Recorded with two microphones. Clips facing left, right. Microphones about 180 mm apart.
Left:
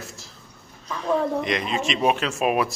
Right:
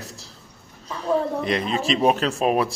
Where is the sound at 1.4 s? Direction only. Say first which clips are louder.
Right 2 dB; 35° right (ahead or behind).